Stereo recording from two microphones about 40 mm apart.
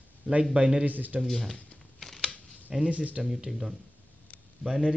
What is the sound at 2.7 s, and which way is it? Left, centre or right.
Speech, centre.